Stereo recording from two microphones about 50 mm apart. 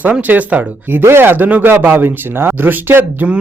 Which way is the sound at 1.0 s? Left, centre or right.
Right.